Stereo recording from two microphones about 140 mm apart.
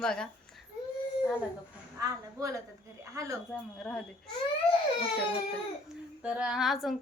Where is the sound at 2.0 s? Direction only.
25° right (ahead or behind).